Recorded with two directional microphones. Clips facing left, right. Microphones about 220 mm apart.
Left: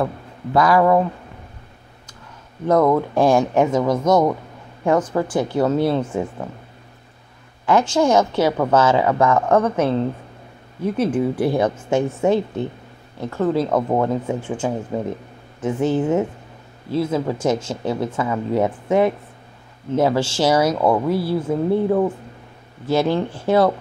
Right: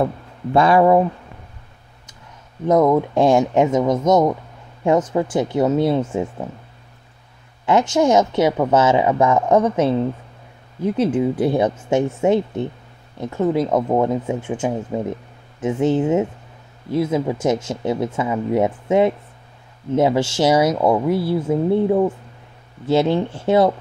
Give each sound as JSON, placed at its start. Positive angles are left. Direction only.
{"t": 0.0, "sound": "speech", "side_deg": -25}
{"t": 2.6, "sound": "speech", "side_deg": -20}
{"t": 7.6, "sound": "speech", "side_deg": -20}
{"t": 10.9, "sound": "speech", "side_deg": -20}